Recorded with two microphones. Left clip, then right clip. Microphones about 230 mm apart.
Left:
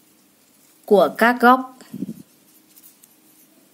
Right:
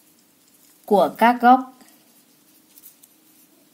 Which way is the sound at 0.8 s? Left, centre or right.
Centre.